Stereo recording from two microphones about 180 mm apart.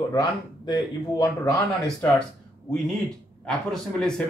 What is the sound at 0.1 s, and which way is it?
Speech, 20° left (ahead or behind).